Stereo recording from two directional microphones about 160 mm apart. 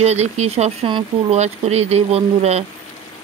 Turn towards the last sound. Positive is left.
turn(degrees=-40)  # may be behind; listen again after turning